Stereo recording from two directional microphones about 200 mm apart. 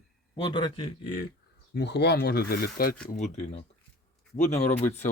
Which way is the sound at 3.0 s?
35° left (ahead or behind).